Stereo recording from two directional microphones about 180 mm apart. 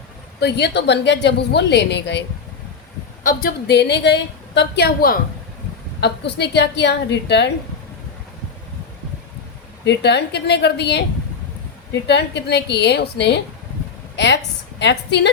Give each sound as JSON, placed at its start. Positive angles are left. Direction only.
{"t": 0.3, "sound": "a woman's voice", "side_deg": 65}
{"t": 3.2, "sound": "a woman's voice", "side_deg": 60}
{"t": 6.0, "sound": "a woman's voice", "side_deg": 70}
{"t": 9.8, "sound": "a woman's voice", "side_deg": 70}
{"t": 12.0, "sound": "a woman's voice", "side_deg": 70}
{"t": 14.8, "sound": "a woman's voice", "side_deg": 70}